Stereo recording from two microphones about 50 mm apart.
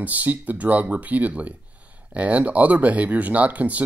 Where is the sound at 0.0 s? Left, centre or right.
Right.